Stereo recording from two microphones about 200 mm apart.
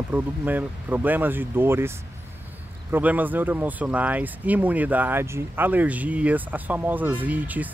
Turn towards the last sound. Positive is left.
turn(degrees=-10)  # may be behind; listen again after turning